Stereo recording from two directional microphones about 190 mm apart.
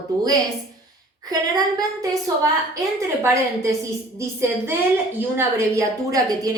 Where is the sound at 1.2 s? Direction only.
20° right (ahead or behind).